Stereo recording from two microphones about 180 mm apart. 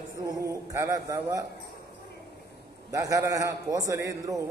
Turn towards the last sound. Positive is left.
turn(degrees=-15)  # may be behind; listen again after turning